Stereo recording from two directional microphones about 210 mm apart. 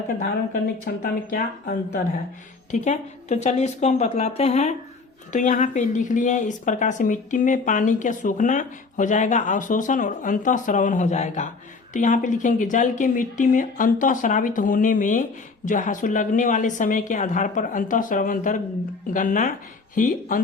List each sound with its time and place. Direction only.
0.9 s speech: 45° left (ahead or behind)
2.8 s speech: 35° left (ahead or behind)